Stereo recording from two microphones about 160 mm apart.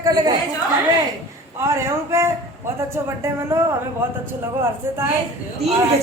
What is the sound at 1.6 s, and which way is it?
Speech, 15° right (ahead or behind).